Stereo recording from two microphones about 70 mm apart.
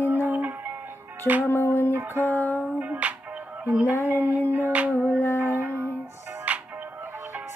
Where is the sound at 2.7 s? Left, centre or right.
Right.